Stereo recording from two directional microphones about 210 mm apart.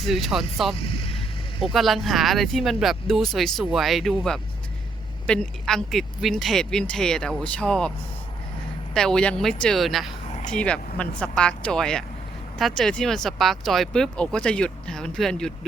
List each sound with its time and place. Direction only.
0.0 s speech: centre (ahead or behind)
0.8 s vehicle: 25° left (ahead or behind)
1.7 s speech: centre (ahead or behind)
9.0 s speech: 5° left (ahead or behind)